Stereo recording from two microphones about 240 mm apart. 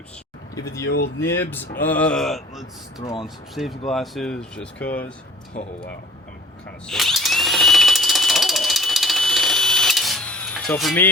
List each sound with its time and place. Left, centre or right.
0.5 s speech: centre
0.9 s speech: left
1.3 s speech: centre
6.8 s a sound: centre